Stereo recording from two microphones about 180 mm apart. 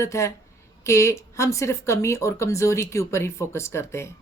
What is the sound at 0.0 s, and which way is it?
Speech, 15° left (ahead or behind).